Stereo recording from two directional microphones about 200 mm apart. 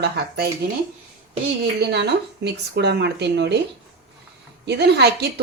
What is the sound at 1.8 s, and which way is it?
Speech, 55° right (ahead or behind).